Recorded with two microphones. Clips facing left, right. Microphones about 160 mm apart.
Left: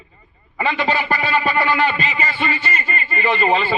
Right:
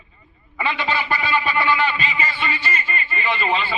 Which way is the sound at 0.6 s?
40° left (ahead or behind).